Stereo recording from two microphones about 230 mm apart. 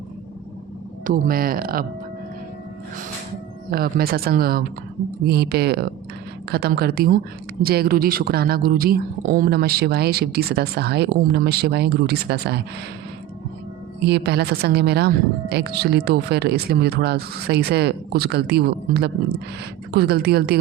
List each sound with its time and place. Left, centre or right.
1.0 s speech: right
3.7 s a woman's voice: right
14.0 s a woman's voice: right